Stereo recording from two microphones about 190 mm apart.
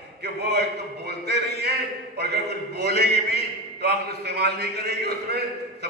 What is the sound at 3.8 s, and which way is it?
A man's voice, 60° right (ahead or behind).